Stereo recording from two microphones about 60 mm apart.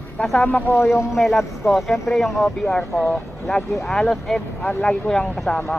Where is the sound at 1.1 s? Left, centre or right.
Centre.